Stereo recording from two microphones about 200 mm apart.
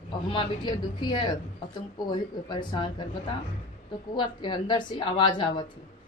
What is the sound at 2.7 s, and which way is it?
Speech, 25° left (ahead or behind).